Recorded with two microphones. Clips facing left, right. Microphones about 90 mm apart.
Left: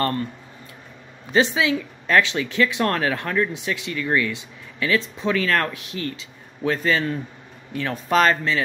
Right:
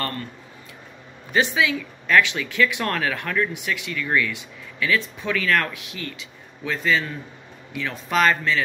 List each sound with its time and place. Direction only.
1.3 s speech: 30° left (ahead or behind)